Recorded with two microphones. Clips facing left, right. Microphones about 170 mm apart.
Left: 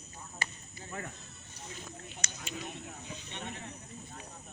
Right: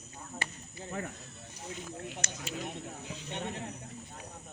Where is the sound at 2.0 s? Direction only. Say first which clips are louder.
Right 6 dB; 70° right (ahead or behind).